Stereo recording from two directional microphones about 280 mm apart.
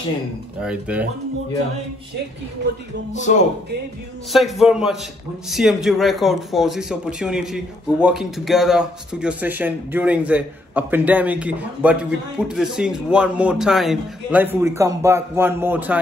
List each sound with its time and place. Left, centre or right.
0.6 s speech: centre
3.1 s speech: left
4.3 s speech: centre